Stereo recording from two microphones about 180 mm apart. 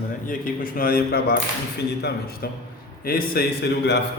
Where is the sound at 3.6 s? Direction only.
70° left (ahead or behind).